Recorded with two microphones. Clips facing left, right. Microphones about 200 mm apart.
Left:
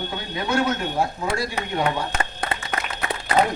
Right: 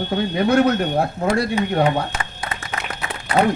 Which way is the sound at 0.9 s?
60° right (ahead or behind).